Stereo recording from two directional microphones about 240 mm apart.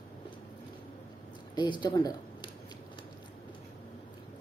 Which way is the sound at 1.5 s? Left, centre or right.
Centre.